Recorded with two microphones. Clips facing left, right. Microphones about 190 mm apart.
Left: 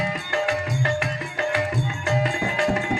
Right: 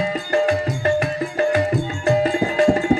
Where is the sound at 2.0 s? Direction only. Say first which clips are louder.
Right 7 dB; 35° right (ahead or behind).